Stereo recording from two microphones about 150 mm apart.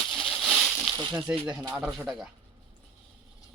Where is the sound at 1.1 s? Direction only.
5° right (ahead or behind).